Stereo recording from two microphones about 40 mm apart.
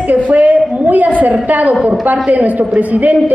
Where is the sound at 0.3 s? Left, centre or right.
Right.